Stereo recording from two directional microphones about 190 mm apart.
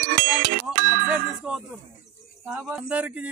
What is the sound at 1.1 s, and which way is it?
Speech, 5° right (ahead or behind).